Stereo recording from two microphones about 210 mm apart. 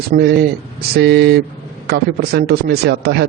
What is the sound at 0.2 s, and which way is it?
A man's voice, 50° right (ahead or behind).